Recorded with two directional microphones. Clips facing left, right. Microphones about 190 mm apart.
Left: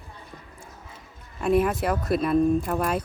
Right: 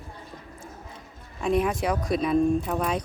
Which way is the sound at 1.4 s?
5° left (ahead or behind).